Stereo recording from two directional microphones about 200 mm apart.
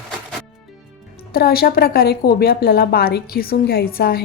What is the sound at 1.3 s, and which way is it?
A woman's voice, 50° left (ahead or behind).